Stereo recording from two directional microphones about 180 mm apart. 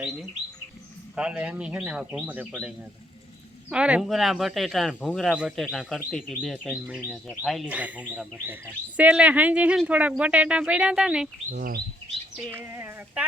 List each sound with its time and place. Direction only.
0.0 s speech: centre (ahead or behind)
3.7 s speech: 5° right (ahead or behind)
11.5 s bird: 55° right (ahead or behind)
12.5 s speech: 15° right (ahead or behind)